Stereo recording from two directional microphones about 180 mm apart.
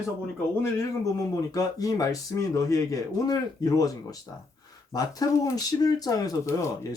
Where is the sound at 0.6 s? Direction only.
15° left (ahead or behind).